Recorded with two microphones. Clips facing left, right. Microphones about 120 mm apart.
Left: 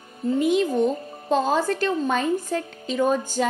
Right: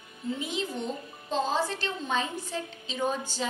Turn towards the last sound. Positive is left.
turn(degrees=50)  # may be behind; listen again after turning